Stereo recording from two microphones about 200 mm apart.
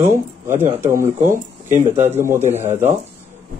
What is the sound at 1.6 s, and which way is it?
Speech, 35° right (ahead or behind).